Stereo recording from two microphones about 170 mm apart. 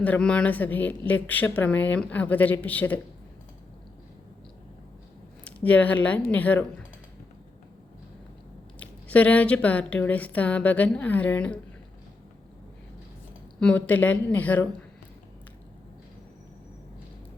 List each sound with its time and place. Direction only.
0.0 s a woman's voice: 5° left (ahead or behind)
5.5 s a woman's voice: 10° left (ahead or behind)
8.8 s a woman's voice: 10° left (ahead or behind)
13.6 s a woman's voice: 5° left (ahead or behind)